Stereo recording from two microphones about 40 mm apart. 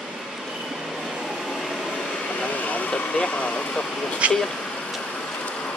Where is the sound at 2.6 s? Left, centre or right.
Left.